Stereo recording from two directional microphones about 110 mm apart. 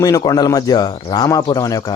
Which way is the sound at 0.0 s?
35° left (ahead or behind).